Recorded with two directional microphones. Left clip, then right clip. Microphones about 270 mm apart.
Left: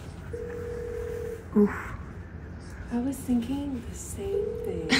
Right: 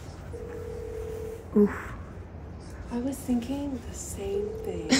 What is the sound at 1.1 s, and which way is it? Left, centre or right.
Telephone dialing, centre.